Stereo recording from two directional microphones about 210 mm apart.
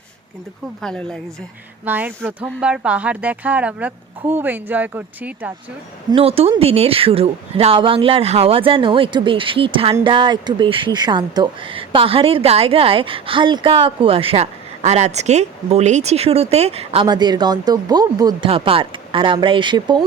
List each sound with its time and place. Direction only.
0.8 s speech: 5° left (ahead or behind)
1.8 s speech: 10° right (ahead or behind)
6.1 s a woman's voice: 25° right (ahead or behind)